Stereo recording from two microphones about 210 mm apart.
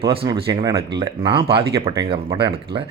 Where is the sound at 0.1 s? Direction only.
25° right (ahead or behind).